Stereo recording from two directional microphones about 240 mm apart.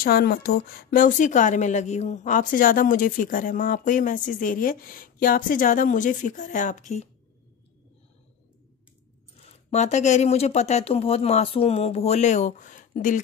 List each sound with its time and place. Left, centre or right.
0.0 s a woman's voice: left
9.7 s speech: left